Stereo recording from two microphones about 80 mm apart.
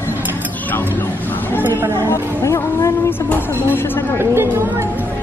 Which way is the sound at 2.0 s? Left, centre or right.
Left.